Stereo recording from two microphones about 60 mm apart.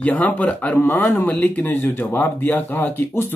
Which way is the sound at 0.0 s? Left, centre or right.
Left.